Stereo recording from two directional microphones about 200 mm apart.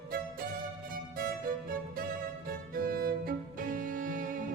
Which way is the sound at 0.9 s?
45° right (ahead or behind).